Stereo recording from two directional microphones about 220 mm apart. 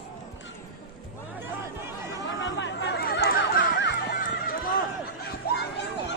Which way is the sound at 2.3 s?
55° left (ahead or behind).